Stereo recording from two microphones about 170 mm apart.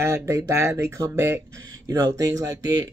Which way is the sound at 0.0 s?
15° right (ahead or behind).